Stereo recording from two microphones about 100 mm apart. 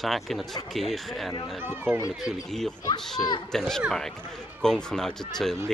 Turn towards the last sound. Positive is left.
turn(degrees=5)  # may be behind; listen again after turning